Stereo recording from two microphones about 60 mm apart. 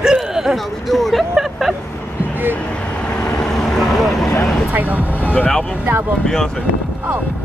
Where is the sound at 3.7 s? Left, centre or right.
Centre.